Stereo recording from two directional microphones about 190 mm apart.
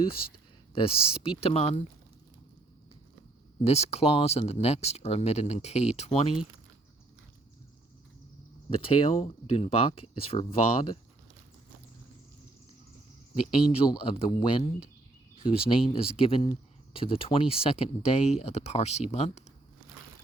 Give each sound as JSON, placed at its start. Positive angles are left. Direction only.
{"t": 0.7, "sound": "speech", "side_deg": 30}
{"t": 3.6, "sound": "speech", "side_deg": 35}
{"t": 8.7, "sound": "speech", "side_deg": 30}
{"t": 13.7, "sound": "speech", "side_deg": 30}